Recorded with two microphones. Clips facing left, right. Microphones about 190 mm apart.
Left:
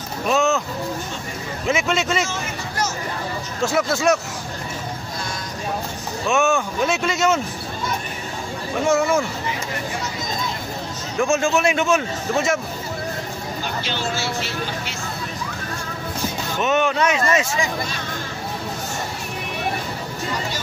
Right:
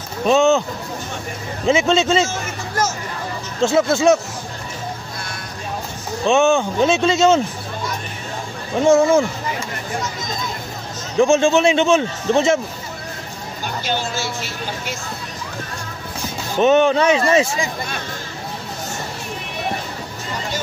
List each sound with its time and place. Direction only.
0.3 s a man's voice: 30° right (ahead or behind)
1.7 s a man's voice: 30° right (ahead or behind)
2.2 s hubbub: 45° right (ahead or behind)
3.6 s a man's voice: 25° right (ahead or behind)
6.2 s a man's voice: 25° right (ahead or behind)
8.8 s a man's voice: 30° right (ahead or behind)
11.1 s a man's voice: 30° right (ahead or behind)
13.8 s speech: 45° right (ahead or behind)
16.5 s speech: 30° right (ahead or behind)